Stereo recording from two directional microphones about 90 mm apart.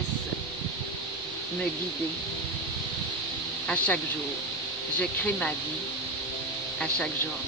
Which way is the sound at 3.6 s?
15° left (ahead or behind).